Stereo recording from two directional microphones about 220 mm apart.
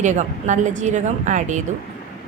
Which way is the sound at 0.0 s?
35° right (ahead or behind).